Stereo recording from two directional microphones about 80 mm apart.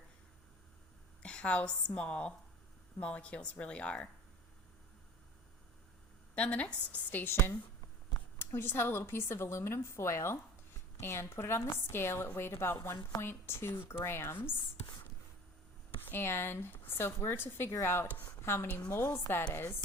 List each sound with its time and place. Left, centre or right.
1.2 s a woman's voice: centre
6.3 s a woman's voice: centre
16.0 s a woman's voice: left
18.7 s a woman's voice: centre
18.9 s a woman's voice: left